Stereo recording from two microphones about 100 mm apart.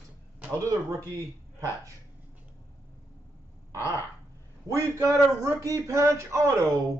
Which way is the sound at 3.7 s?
30° left (ahead or behind).